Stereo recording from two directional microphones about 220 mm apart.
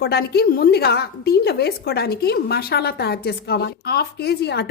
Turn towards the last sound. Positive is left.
turn(degrees=45)  # may be behind; listen again after turning